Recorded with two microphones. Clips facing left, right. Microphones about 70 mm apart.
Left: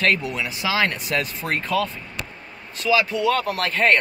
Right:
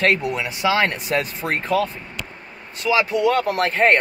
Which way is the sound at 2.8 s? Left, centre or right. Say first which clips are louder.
Even; centre.